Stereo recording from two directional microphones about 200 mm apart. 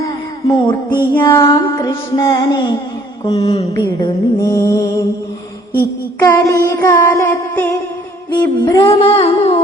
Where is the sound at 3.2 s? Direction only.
30° left (ahead or behind).